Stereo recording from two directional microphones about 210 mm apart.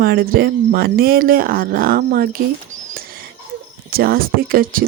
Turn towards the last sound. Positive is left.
turn(degrees=-45)  # may be behind; listen again after turning